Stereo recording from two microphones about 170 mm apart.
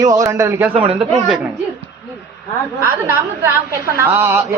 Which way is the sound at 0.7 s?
30° right (ahead or behind).